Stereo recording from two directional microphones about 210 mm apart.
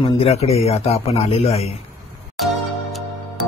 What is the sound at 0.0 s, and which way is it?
Speech, 30° left (ahead or behind).